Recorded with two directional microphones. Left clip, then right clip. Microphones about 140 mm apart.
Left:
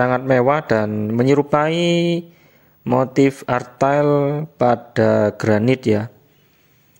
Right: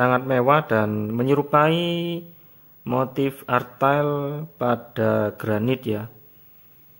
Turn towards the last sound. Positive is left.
turn(degrees=30)  # may be behind; listen again after turning